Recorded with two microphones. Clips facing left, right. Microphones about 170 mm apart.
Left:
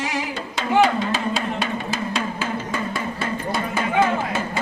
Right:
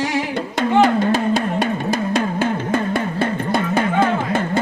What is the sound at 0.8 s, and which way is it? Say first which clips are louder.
Music: right 4 dB; 55° right (ahead or behind).